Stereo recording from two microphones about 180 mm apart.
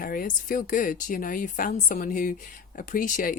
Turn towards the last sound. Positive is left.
turn(degrees=50)  # may be behind; listen again after turning